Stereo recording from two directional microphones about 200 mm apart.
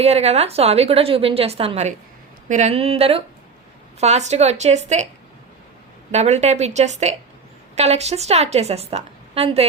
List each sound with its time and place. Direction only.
0.0 s a woman's voice: 30° right (ahead or behind)
6.1 s a woman's voice: 35° right (ahead or behind)